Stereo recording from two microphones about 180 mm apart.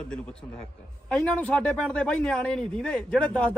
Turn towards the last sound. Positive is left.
turn(degrees=5)  # may be behind; listen again after turning